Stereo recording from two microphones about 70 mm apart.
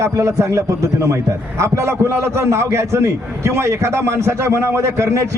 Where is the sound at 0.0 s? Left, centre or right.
Right.